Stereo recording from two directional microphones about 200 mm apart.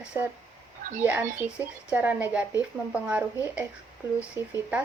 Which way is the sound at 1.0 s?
10° right (ahead or behind).